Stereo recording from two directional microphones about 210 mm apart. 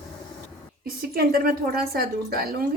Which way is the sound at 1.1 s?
45° right (ahead or behind).